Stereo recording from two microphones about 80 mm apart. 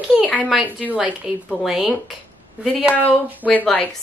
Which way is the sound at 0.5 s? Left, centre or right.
Centre.